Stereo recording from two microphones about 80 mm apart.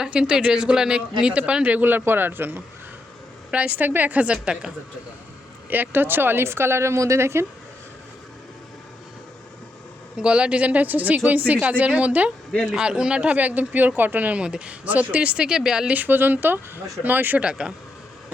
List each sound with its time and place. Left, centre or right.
0.0 s speech: centre
3.5 s speech: centre
5.7 s speech: right
10.2 s speech: centre
16.0 s speech: right